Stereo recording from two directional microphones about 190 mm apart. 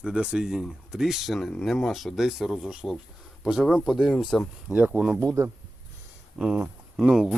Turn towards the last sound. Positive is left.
turn(degrees=0)  # may be behind; listen again after turning